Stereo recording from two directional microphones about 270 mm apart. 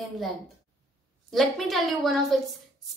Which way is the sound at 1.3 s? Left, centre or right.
Centre.